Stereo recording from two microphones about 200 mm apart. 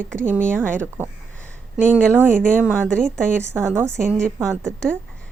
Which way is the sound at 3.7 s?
10° right (ahead or behind).